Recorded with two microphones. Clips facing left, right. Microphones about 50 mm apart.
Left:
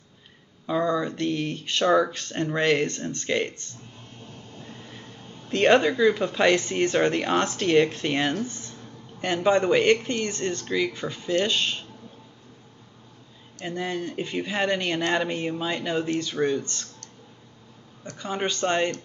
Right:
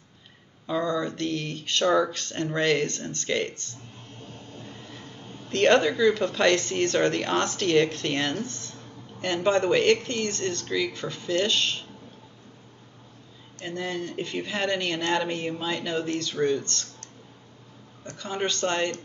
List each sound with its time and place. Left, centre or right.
0.7 s speech: centre
4.6 s vehicle: centre
5.5 s speech: centre
13.7 s speech: centre
18.1 s speech: centre